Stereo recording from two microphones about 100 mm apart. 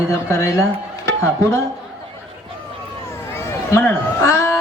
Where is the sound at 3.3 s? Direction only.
25° left (ahead or behind).